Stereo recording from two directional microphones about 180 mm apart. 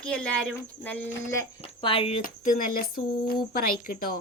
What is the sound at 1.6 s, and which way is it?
Speech, 30° left (ahead or behind).